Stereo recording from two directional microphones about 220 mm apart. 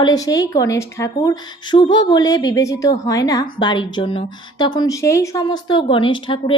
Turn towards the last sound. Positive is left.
turn(degrees=20)  # may be behind; listen again after turning